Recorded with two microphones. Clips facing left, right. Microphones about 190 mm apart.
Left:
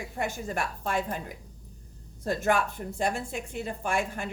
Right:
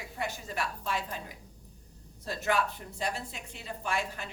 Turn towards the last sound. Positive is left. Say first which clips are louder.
# left 5 dB
turn(degrees=50)  # may be behind; listen again after turning